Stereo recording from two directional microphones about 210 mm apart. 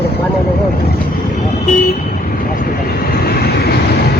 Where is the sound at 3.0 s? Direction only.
45° left (ahead or behind).